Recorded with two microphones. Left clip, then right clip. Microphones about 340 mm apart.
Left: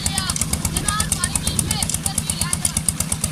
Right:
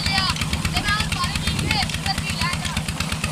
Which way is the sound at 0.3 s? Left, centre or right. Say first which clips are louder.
Right 1 dB; centre.